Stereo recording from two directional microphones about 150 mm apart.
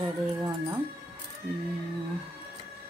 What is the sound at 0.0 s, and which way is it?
Music, 25° right (ahead or behind).